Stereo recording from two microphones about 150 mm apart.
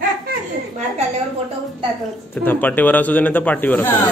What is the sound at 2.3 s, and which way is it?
Speech, 15° left (ahead or behind).